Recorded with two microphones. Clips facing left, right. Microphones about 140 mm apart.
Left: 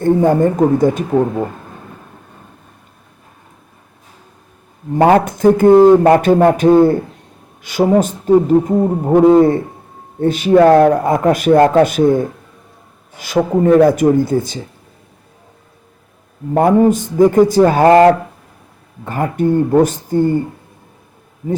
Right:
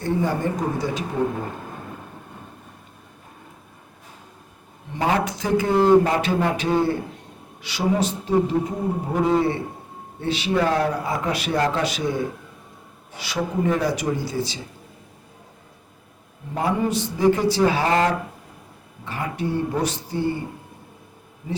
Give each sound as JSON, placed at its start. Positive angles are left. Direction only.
{"t": 0.0, "sound": "speech", "side_deg": 50}
{"t": 4.9, "sound": "speech", "side_deg": 55}
{"t": 16.6, "sound": "speech", "side_deg": 50}